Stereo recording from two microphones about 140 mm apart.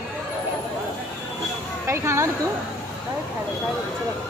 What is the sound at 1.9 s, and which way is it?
Speech, 20° right (ahead or behind).